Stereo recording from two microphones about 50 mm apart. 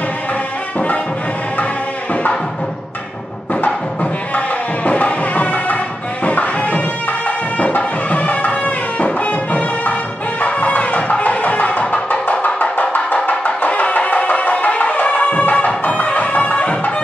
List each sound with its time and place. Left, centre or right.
4.8 s music: left